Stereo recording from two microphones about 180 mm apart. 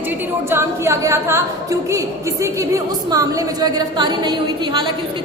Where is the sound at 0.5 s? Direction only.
15° right (ahead or behind).